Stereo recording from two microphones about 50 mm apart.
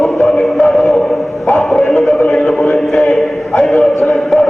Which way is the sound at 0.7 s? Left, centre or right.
Centre.